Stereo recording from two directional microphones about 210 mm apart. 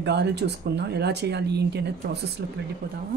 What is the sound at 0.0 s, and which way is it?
Speech, 55° right (ahead or behind).